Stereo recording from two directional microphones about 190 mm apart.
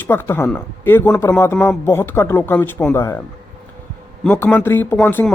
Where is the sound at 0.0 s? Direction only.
10° left (ahead or behind).